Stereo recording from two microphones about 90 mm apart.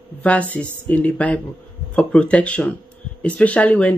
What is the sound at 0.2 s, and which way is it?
Speech, 15° left (ahead or behind).